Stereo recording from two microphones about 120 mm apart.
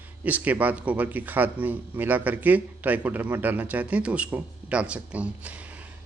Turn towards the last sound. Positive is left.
turn(degrees=-10)  # may be behind; listen again after turning